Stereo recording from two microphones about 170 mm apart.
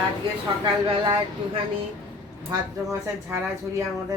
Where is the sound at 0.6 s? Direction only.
30° right (ahead or behind).